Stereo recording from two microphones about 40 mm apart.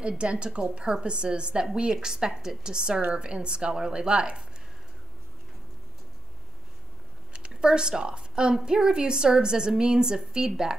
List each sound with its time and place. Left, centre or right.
0.2 s a woman's voice: right
7.3 s a woman's voice: right